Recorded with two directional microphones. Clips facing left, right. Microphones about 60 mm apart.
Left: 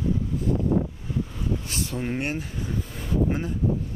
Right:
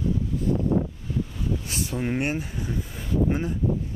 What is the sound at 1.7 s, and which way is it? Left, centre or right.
Speech, centre.